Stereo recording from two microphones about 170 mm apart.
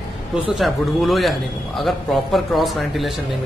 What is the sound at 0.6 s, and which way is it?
A man's voice, centre (ahead or behind).